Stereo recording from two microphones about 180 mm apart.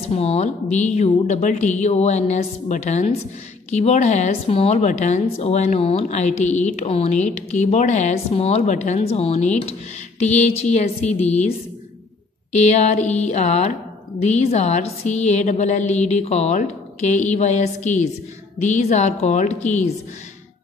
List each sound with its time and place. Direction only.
0.0 s a woman's voice: 35° left (ahead or behind)
12.5 s a woman's voice: 40° left (ahead or behind)